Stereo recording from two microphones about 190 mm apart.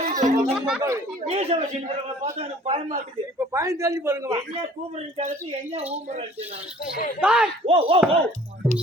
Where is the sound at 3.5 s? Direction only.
15° right (ahead or behind).